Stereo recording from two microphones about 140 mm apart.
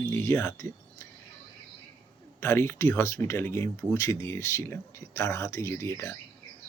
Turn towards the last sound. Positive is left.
turn(degrees=20)  # may be behind; listen again after turning